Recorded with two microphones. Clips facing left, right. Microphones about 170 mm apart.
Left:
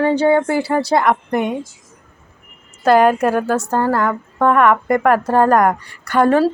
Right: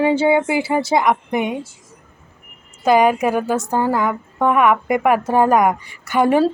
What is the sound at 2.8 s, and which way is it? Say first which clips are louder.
A woman's voice: left 2 dB; centre (ahead or behind).